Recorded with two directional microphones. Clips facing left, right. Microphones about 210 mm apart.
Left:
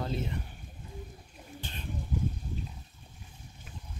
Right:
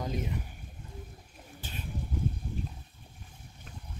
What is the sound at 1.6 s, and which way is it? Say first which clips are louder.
Bird: right 1 dB; 10° right (ahead or behind).